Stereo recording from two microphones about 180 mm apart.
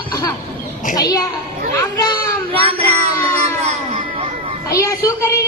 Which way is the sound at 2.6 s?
30° right (ahead or behind).